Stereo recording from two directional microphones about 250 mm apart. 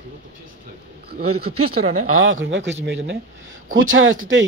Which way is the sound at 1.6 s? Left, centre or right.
Right.